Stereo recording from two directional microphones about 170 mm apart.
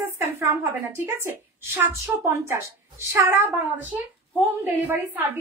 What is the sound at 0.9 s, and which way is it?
A woman's voice, 15° right (ahead or behind).